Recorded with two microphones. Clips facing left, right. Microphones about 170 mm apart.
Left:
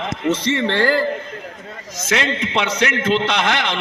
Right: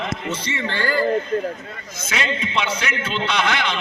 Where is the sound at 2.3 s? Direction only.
75° left (ahead or behind).